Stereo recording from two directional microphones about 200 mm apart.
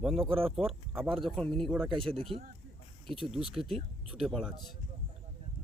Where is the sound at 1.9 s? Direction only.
25° right (ahead or behind).